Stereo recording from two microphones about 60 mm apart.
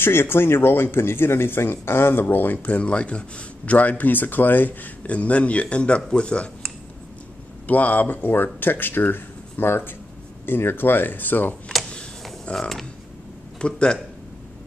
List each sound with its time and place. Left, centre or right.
0.0 s speech: left; by 6.5 s centre
7.6 s speech: left
12.5 s speech: centre
13.6 s speech: centre